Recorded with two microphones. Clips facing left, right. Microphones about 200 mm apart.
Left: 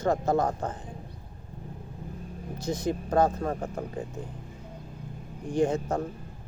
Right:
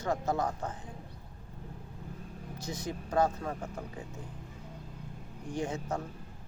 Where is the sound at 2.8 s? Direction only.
50° left (ahead or behind).